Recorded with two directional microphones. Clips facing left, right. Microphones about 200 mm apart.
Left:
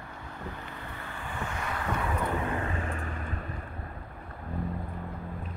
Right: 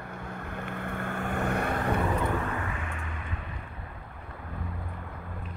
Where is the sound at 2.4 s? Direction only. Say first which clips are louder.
Left 2 dB; 30° left (ahead or behind).